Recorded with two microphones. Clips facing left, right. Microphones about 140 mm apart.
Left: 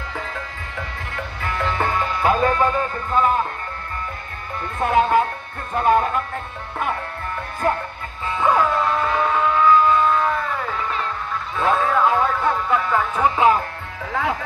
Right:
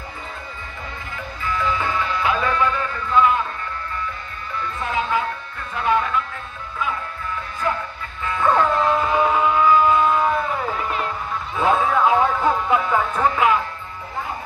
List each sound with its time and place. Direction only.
1.1 s music: 65° left (ahead or behind); by 3.3 s 40° left (ahead or behind)
4.7 s speech: 55° left (ahead or behind)
7.6 s music: 50° left (ahead or behind)
8.4 s a sound: 10° left (ahead or behind); by 11.1 s 10° right (ahead or behind)
11.6 s music: 5° right (ahead or behind)
13.4 s music: 30° left (ahead or behind)